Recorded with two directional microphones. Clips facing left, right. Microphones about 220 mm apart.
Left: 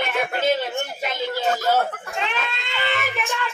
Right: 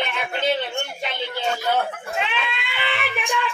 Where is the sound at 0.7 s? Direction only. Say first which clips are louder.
Left 1 dB; 5° left (ahead or behind).